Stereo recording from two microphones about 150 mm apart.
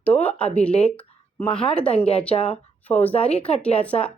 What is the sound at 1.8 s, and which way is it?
Speech, 40° left (ahead or behind).